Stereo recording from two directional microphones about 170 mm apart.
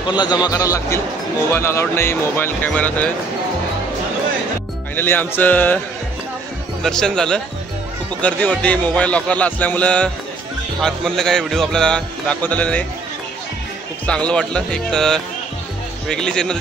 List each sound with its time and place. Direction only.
0.1 s a man's voice: 25° left (ahead or behind); by 3.1 s 10° left (ahead or behind)
4.9 s a man's voice: 10° left (ahead or behind)
6.8 s a man's voice: 5° left (ahead or behind)
14.0 s speech: 5° left (ahead or behind)